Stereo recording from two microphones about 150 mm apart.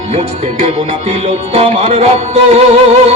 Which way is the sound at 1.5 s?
40° right (ahead or behind).